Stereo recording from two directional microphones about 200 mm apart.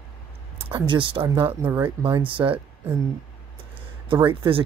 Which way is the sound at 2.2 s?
25° right (ahead or behind).